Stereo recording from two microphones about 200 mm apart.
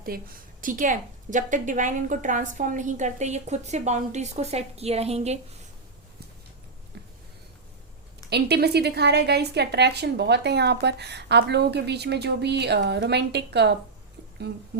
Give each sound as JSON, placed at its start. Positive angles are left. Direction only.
{"t": 0.1, "sound": "a woman's voice", "side_deg": -50}
{"t": 6.9, "sound": "a sound", "side_deg": -55}
{"t": 8.3, "sound": "a woman's voice", "side_deg": -55}